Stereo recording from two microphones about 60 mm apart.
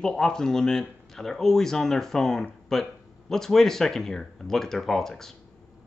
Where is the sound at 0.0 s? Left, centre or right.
Centre.